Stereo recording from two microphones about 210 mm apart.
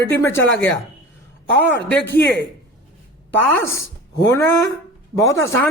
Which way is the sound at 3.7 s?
15° left (ahead or behind).